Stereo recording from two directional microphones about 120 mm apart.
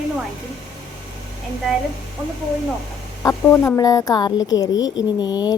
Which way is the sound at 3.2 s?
25° left (ahead or behind).